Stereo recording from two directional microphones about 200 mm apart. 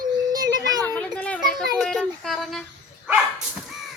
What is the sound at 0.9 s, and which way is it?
Children playing, 5° left (ahead or behind).